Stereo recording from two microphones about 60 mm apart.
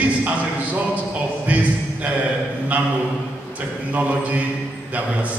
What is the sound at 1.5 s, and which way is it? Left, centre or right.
Speech, right.